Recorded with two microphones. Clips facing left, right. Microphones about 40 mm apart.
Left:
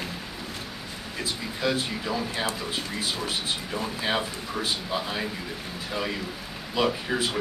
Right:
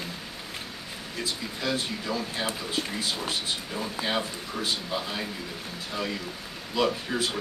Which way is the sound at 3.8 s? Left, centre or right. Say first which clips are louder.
Left 2 dB; centre.